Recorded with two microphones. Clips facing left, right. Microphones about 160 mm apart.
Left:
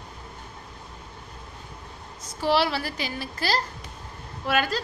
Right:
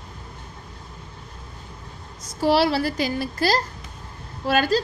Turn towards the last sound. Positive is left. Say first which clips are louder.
# right 5 dB
turn(degrees=-35)  # may be behind; listen again after turning